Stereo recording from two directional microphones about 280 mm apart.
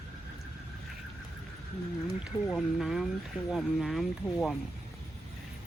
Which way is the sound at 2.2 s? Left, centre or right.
Centre.